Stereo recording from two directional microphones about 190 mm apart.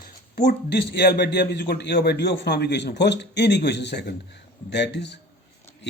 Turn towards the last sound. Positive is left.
turn(degrees=65)  # may be behind; listen again after turning